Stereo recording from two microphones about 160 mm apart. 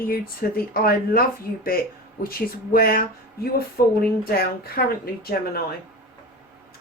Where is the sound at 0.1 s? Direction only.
65° left (ahead or behind).